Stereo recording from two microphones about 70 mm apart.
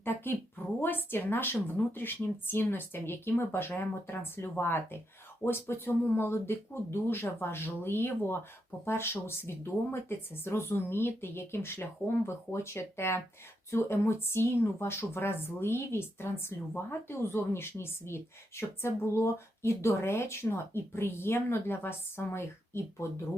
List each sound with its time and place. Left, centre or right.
0.0 s a woman's voice: left